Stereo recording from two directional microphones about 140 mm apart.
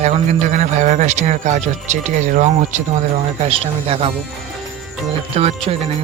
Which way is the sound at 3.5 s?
45° right (ahead or behind).